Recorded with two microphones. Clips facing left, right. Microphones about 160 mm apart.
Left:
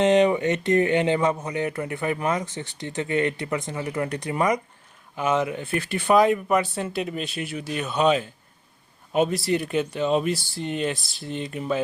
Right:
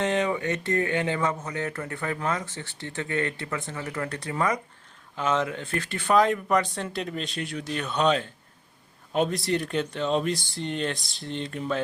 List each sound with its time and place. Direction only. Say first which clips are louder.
0.0 s speech: left 7 dB; 20° left (ahead or behind)